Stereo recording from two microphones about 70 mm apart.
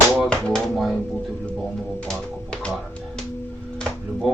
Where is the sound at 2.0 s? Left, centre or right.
Centre.